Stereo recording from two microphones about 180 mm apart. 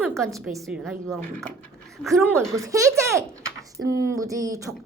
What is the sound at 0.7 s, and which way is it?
Speech, 5° right (ahead or behind).